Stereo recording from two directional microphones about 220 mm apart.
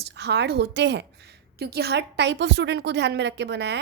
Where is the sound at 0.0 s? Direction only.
50° right (ahead or behind).